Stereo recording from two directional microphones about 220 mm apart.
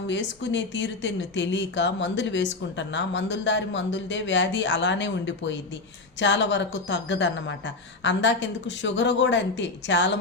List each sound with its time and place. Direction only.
0.1 s speech: 55° left (ahead or behind)